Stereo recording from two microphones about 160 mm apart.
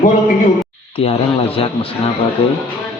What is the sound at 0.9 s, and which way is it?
Speech, 35° left (ahead or behind).